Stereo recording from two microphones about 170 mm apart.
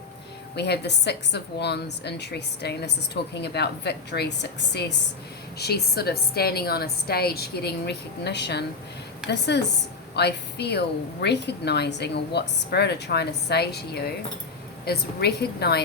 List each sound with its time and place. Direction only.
0.5 s a woman's voice: 80° left
5.5 s a woman's voice: 70° left (ahead or behind)